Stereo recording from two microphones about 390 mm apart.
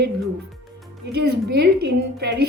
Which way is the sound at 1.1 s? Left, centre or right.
Right.